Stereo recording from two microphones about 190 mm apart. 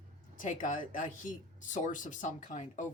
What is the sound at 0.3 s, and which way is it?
Speech, 45° left (ahead or behind).